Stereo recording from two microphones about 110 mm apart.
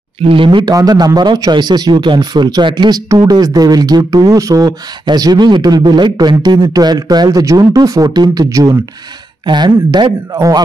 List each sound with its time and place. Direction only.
0.3 s speech: 50° right (ahead or behind)
0.7 s speech: 35° right (ahead or behind)